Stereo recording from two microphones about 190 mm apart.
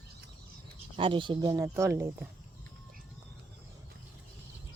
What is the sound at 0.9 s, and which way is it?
Speech, 25° right (ahead or behind).